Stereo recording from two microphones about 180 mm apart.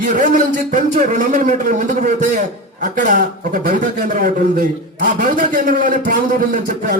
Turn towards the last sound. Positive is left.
turn(degrees=-50)  # may be behind; listen again after turning